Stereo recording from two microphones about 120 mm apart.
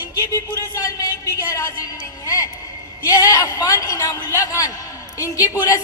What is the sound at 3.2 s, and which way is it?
A woman's voice, 25° left (ahead or behind).